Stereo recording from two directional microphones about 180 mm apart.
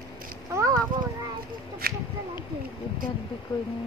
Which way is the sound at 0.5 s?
15° right (ahead or behind).